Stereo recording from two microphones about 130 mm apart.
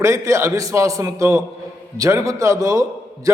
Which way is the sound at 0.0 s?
25° right (ahead or behind).